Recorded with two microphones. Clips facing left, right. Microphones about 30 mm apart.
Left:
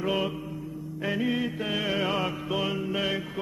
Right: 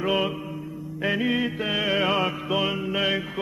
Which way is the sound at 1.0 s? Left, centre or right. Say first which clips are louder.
Right 4 dB; right.